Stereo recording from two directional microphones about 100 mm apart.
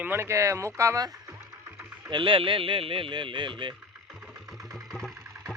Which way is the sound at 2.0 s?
55° right (ahead or behind).